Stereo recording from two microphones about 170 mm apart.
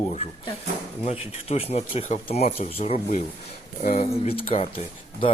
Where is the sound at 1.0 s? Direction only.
35° left (ahead or behind).